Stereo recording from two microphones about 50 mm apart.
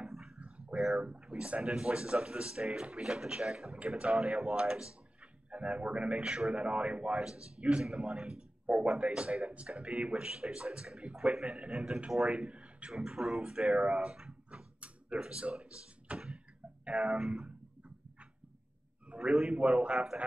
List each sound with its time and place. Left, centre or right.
0.4 s a sound: right
0.9 s speech: right
13.0 s speech: centre
13.7 s speech: right
16.8 s music: right
17.3 s guitar: right
19.0 s a sound: right
19.5 s speech: right